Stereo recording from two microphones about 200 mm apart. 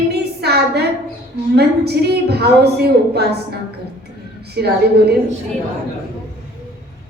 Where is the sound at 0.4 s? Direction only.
55° right (ahead or behind).